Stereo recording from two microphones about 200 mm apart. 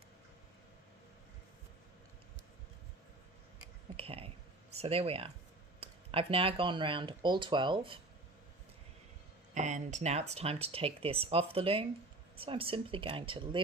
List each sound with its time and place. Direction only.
3.9 s speech: 30° right (ahead or behind)
9.6 s speech: 35° right (ahead or behind)